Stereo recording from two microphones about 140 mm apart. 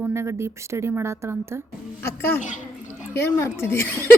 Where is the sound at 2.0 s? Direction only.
15° left (ahead or behind).